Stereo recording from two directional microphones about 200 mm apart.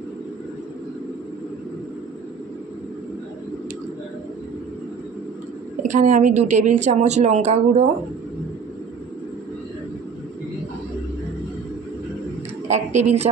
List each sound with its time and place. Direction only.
5.8 s speech: 40° right (ahead or behind)
12.6 s speech: 35° right (ahead or behind)